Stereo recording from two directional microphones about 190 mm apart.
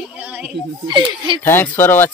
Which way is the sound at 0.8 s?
25° right (ahead or behind).